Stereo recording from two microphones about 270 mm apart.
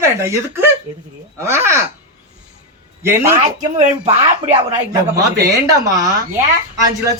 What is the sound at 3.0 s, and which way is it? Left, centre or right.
Speech, centre.